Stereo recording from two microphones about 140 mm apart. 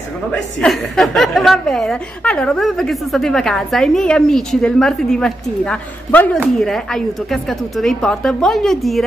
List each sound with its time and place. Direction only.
0.7 s a woman's voice: centre (ahead or behind)